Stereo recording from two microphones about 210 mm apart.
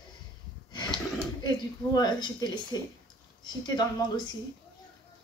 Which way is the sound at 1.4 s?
20° left (ahead or behind).